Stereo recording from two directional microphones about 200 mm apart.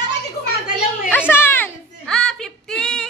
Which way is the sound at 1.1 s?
10° left (ahead or behind).